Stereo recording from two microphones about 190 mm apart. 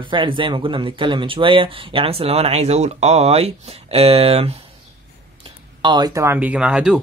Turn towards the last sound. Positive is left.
turn(degrees=-5)  # may be behind; listen again after turning